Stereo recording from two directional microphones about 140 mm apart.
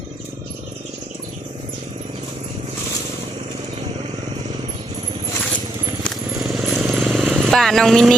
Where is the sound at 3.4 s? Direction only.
50° right (ahead or behind).